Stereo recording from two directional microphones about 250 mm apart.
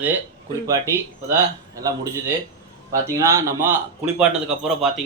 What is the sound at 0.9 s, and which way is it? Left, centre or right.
A man's voice, centre.